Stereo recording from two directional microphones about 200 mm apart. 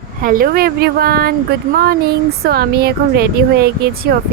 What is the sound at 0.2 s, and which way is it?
Speech, 45° right (ahead or behind).